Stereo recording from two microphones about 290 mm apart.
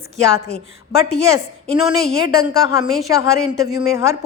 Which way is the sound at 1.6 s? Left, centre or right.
Centre.